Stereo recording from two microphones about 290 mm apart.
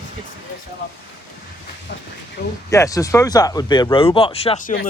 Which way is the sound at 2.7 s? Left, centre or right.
Centre.